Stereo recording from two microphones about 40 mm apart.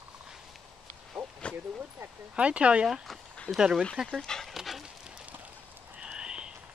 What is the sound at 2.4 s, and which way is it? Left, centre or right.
Speech, right.